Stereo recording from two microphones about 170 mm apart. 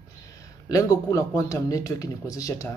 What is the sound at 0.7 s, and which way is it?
Speech, 20° left (ahead or behind).